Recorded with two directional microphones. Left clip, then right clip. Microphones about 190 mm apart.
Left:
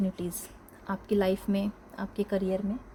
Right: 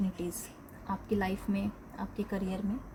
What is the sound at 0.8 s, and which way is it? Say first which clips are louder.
A woman's voice: left 6 dB; 60° left (ahead or behind).